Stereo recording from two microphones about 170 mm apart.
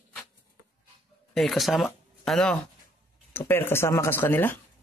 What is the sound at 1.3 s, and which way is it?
Speech, centre (ahead or behind).